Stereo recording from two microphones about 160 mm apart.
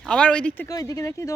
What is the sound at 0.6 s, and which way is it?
Speech, 20° left (ahead or behind).